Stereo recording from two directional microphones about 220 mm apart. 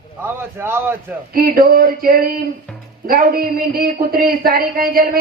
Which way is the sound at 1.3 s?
40° right (ahead or behind).